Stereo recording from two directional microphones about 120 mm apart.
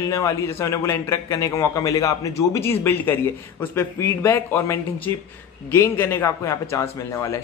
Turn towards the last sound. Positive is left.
turn(degrees=20)  # may be behind; listen again after turning